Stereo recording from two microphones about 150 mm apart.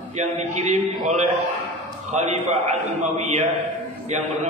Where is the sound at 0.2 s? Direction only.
50° right (ahead or behind).